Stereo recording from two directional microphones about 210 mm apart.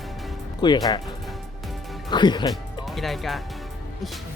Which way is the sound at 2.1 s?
20° left (ahead or behind).